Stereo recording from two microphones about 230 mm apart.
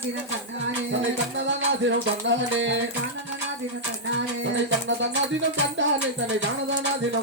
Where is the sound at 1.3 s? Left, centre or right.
Right.